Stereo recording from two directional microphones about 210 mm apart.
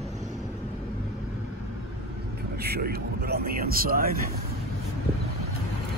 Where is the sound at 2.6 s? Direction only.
50° right (ahead or behind).